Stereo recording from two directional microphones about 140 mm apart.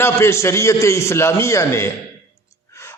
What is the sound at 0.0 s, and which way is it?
A man's voice, 20° left (ahead or behind).